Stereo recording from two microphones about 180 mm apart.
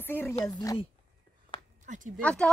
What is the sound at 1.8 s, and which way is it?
Speech, 45° right (ahead or behind).